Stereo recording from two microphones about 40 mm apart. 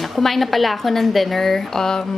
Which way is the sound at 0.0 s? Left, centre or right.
Centre.